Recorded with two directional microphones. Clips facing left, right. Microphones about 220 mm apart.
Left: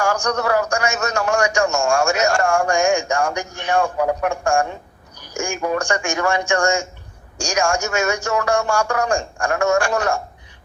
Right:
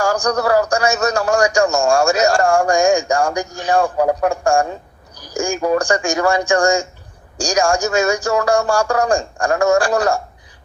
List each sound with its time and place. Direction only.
0.0 s a man's voice: 35° right (ahead or behind)